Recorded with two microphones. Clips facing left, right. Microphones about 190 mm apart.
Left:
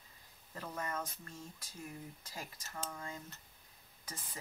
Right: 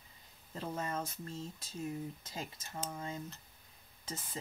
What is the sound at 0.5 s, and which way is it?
Speech, 25° right (ahead or behind).